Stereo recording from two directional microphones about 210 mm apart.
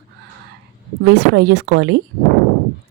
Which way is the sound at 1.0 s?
55° right (ahead or behind).